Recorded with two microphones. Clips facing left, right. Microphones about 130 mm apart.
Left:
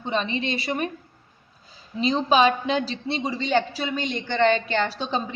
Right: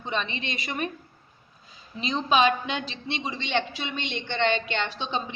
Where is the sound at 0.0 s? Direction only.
35° left (ahead or behind).